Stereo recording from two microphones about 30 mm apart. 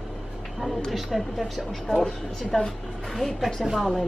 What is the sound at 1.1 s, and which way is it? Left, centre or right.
Speech, centre.